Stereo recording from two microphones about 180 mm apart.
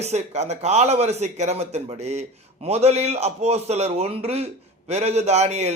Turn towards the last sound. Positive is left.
turn(degrees=-35)  # may be behind; listen again after turning